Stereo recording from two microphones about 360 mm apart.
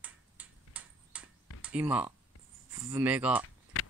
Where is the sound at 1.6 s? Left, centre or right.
Centre.